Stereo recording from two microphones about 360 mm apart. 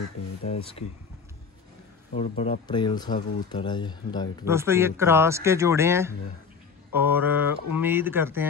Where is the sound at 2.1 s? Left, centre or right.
Centre.